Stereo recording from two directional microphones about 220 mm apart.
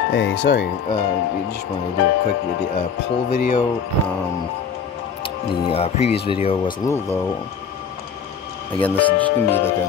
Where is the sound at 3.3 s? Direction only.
35° left (ahead or behind).